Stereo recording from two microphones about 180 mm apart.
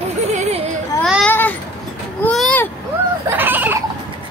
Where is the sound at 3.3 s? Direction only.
10° right (ahead or behind).